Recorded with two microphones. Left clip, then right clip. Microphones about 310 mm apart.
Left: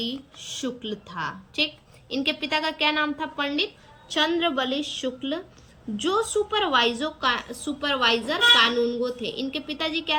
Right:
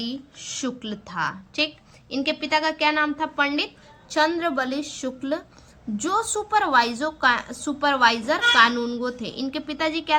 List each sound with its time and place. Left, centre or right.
0.0 s a woman's voice: centre
4.1 s a woman's voice: centre